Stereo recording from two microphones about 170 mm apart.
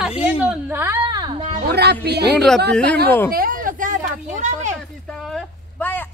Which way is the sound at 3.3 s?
55° right (ahead or behind).